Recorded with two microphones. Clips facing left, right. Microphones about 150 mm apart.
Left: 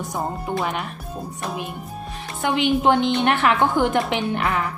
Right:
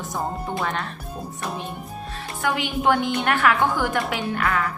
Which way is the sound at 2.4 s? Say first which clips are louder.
Left 4 dB; 25° left (ahead or behind).